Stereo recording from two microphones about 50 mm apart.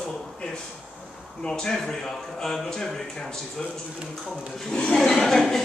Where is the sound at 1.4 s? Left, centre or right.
Centre.